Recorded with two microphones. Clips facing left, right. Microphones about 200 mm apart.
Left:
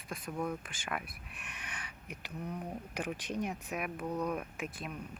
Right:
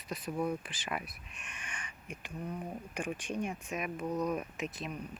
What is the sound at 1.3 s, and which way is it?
Speech, 65° left (ahead or behind).